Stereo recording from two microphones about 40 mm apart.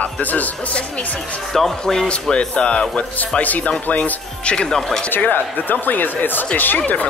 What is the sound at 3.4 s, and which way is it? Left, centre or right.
Speech, left.